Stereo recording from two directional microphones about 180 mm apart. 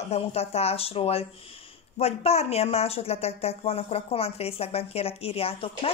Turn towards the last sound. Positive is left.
turn(degrees=30)  # may be behind; listen again after turning